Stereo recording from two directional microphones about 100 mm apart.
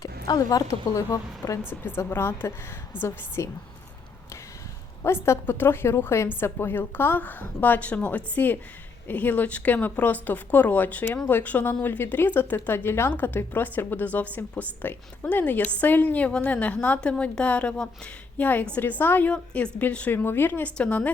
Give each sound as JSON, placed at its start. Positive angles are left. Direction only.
{"t": 0.0, "sound": "a woman's voice", "side_deg": 40}
{"t": 1.8, "sound": "a woman's voice", "side_deg": 20}
{"t": 5.0, "sound": "a woman's voice", "side_deg": 25}